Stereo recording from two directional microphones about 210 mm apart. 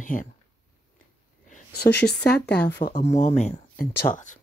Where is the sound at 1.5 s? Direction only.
50° left (ahead or behind).